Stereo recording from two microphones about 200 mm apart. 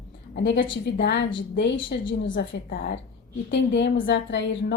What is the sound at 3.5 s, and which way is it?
A woman's voice, 60° left (ahead or behind).